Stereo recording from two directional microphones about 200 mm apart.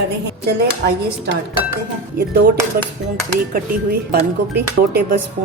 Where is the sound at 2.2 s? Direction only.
50° right (ahead or behind).